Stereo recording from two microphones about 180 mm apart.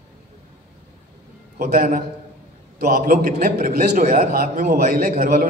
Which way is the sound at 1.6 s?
55° right (ahead or behind).